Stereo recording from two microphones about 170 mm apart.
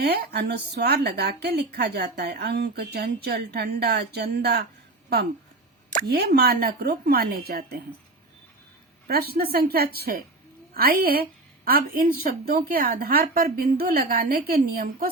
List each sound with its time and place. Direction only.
0.0 s a woman's voice: 70° right (ahead or behind)
6.0 s a woman's voice: 65° right (ahead or behind)
9.0 s a woman's voice: 65° right (ahead or behind)